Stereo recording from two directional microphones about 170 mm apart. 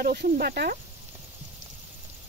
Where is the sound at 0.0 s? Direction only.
65° right (ahead or behind).